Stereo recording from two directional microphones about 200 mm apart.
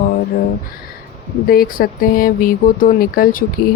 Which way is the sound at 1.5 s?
45° left (ahead or behind).